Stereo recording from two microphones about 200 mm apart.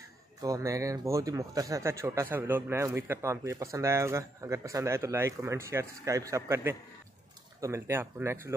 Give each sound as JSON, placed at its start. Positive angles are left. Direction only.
{"t": 0.4, "sound": "speech", "side_deg": -15}